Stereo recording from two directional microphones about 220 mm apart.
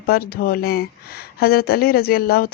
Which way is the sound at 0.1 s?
45° left (ahead or behind).